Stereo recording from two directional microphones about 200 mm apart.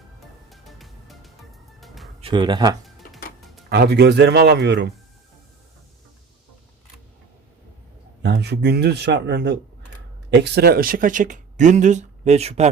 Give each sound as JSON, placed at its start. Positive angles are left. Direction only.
{"t": 0.5, "sound": "music", "side_deg": 0}
{"t": 2.2, "sound": "speech", "side_deg": -20}
{"t": 3.7, "sound": "a man's voice", "side_deg": -55}
{"t": 8.2, "sound": "a man's voice", "side_deg": -55}